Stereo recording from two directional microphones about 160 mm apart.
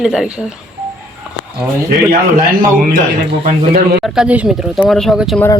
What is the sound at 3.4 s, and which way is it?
Speech, 70° right (ahead or behind).